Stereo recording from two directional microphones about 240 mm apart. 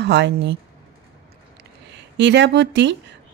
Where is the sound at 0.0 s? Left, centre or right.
Right.